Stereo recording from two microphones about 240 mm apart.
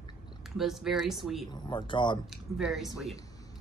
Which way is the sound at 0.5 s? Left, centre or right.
Centre.